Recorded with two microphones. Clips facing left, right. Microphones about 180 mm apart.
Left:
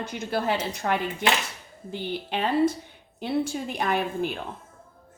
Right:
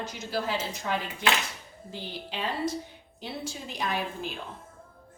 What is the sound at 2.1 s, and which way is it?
Speech, 60° left (ahead or behind).